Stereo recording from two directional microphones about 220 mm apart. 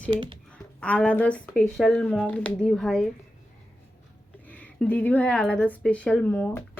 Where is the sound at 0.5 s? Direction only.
5° left (ahead or behind).